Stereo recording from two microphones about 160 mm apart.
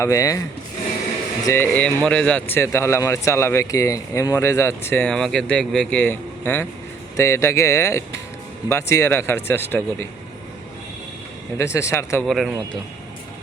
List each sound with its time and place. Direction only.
0.0 s speech: 20° left (ahead or behind)
1.5 s speech: 10° left (ahead or behind)
5.0 s speech: 5° left (ahead or behind)
11.5 s speech: 15° left (ahead or behind)
12.2 s speech: centre (ahead or behind)